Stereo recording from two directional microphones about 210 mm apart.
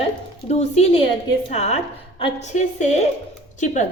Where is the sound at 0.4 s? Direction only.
30° left (ahead or behind).